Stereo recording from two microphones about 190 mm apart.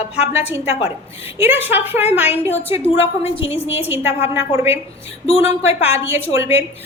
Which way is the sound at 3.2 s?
30° left (ahead or behind).